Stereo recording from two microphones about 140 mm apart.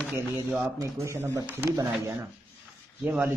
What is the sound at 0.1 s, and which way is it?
Speech, 15° right (ahead or behind).